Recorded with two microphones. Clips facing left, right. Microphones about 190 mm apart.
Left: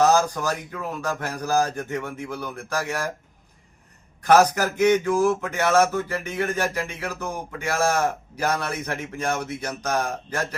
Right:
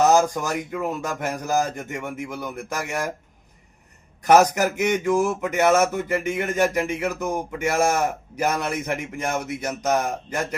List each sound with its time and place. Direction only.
0.1 s speech: 20° right (ahead or behind)
4.3 s speech: 20° right (ahead or behind)